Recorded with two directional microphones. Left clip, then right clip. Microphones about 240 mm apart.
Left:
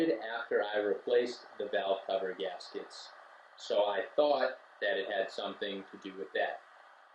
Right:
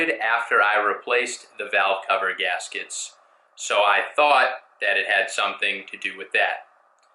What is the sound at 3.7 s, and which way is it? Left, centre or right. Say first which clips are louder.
Speech: right 11 dB; centre.